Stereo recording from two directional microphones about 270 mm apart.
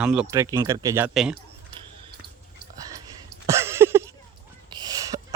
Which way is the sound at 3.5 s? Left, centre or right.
Centre.